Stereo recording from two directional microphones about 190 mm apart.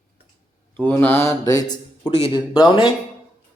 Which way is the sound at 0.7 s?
10° left (ahead or behind).